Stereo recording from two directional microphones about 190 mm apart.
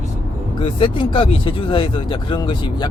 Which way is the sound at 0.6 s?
25° left (ahead or behind).